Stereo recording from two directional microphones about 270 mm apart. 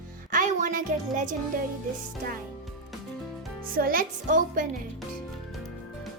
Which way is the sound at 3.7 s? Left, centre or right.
Right.